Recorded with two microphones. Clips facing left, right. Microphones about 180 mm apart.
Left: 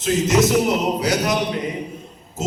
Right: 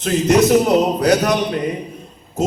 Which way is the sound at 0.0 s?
60° right (ahead or behind).